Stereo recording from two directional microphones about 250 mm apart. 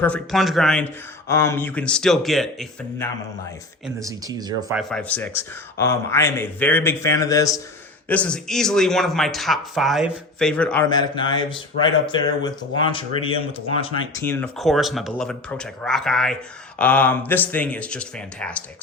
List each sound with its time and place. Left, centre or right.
0.0 s speech: centre
4.0 s speech: centre
4.7 s speech: centre
10.8 s speech: centre
14.2 s speech: centre